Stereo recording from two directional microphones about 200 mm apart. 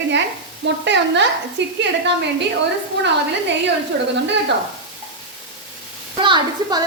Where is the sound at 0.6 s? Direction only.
60° right (ahead or behind).